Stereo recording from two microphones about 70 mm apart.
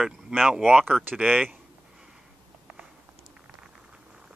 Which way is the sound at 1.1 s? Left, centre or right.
Centre.